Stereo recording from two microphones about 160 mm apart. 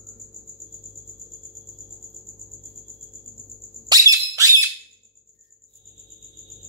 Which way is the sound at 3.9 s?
20° right (ahead or behind).